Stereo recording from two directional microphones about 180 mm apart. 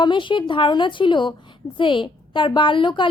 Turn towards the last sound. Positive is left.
turn(degrees=25)  # may be behind; listen again after turning